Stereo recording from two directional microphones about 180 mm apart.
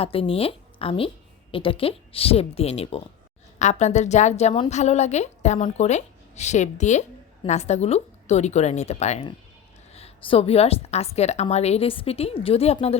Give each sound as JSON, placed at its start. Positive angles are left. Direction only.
{"t": 0.0, "sound": "a woman's voice", "side_deg": 30}